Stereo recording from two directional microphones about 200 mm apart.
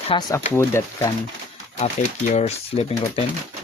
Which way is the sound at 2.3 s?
35° left (ahead or behind).